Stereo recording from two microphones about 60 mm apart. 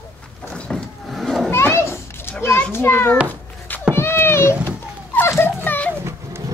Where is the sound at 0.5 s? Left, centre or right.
Centre.